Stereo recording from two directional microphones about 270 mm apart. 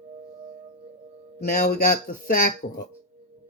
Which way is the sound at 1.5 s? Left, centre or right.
Left.